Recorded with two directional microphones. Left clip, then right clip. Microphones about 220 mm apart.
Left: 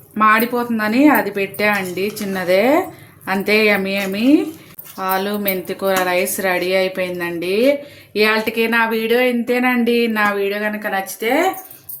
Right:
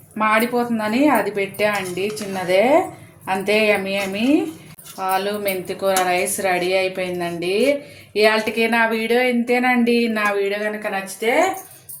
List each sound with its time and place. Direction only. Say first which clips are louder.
0.2 s speech: left 4 dB; 25° left (ahead or behind)